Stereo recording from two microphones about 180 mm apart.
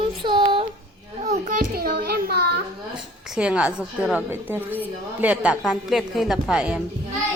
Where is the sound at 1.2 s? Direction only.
45° right (ahead or behind); by 2.6 s 60° right (ahead or behind).